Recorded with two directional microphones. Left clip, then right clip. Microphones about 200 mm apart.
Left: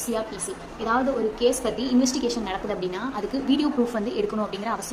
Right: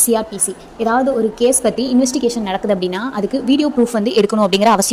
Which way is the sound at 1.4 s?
35° right (ahead or behind).